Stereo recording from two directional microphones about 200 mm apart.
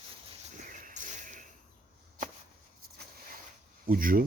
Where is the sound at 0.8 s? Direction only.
40° right (ahead or behind).